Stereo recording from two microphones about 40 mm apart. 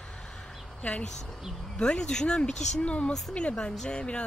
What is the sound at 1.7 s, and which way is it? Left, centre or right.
Speech, centre.